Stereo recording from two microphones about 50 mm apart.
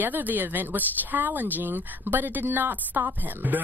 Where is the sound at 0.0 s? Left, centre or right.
Right.